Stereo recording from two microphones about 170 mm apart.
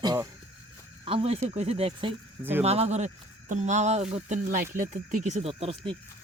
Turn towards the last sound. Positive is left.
turn(degrees=-35)  # may be behind; listen again after turning